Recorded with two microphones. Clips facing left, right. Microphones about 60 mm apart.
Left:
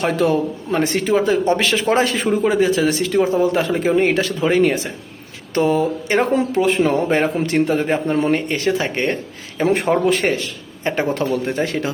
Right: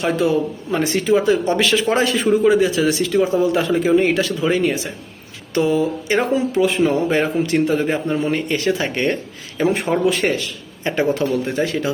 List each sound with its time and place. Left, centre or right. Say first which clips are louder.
0.0 s speech: left 1 dB; left
0.7 s speech: right 1 dB; left
8.1 s speech: left 3 dB; left
8.4 s speech: even; left